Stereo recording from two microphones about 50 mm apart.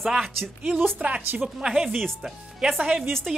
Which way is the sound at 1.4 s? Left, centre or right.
Centre.